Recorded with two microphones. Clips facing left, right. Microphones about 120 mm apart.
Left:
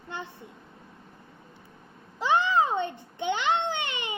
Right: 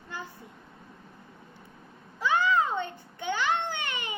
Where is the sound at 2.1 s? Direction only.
25° left (ahead or behind).